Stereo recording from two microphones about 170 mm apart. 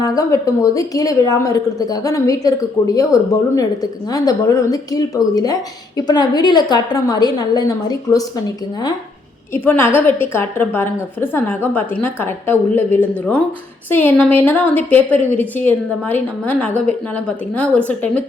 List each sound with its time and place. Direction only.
0.0 s a woman's voice: 20° left (ahead or behind)
9.5 s a woman's voice: 15° left (ahead or behind)